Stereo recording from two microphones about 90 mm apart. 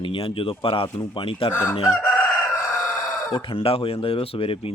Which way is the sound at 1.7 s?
60° left (ahead or behind).